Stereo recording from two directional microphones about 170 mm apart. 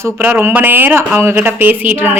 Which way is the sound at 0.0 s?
10° right (ahead or behind).